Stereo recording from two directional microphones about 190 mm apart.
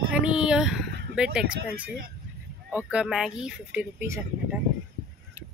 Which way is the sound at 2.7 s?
5° right (ahead or behind).